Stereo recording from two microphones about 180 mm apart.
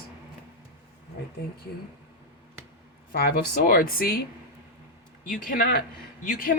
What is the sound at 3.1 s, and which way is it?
Speech, 55° left (ahead or behind).